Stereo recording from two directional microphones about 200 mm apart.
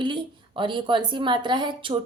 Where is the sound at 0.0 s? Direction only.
25° right (ahead or behind).